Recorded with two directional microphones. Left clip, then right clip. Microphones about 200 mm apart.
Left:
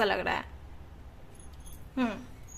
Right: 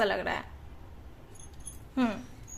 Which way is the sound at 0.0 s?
5° left (ahead or behind).